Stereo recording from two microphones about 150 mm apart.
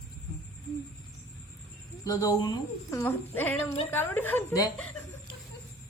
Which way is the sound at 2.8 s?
15° left (ahead or behind).